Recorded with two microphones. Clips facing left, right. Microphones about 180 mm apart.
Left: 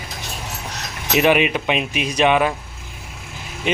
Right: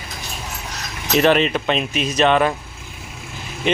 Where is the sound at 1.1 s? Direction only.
10° left (ahead or behind).